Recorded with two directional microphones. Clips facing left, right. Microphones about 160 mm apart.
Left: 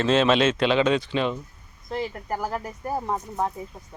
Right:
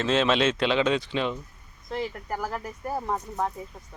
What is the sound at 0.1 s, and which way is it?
Speech, 20° left (ahead or behind).